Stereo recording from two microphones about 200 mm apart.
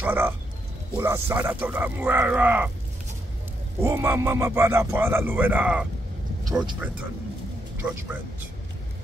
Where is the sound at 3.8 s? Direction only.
15° right (ahead or behind).